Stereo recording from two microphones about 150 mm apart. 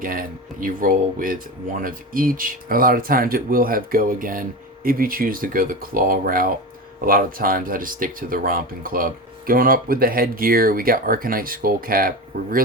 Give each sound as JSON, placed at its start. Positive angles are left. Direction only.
{"t": 0.0, "sound": "speech", "side_deg": -70}